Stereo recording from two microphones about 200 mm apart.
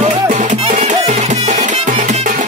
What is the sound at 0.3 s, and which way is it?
Music, 40° right (ahead or behind).